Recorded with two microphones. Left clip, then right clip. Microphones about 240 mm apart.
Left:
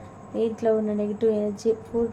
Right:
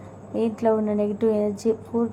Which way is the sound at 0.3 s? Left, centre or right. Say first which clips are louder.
Right 1 dB; right.